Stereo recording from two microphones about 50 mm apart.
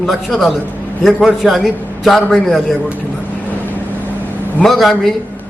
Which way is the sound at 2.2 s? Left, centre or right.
Centre.